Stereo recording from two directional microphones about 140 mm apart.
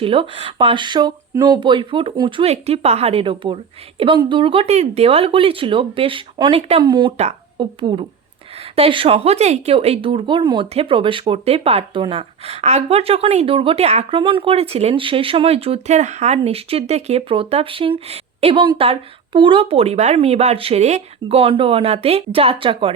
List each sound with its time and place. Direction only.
0.0 s speech: 40° right (ahead or behind)